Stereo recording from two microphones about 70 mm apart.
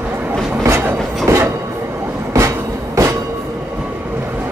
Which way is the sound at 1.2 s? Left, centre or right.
Right.